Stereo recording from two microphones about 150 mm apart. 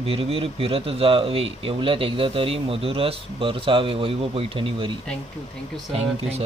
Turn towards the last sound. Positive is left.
turn(degrees=-45)  # may be behind; listen again after turning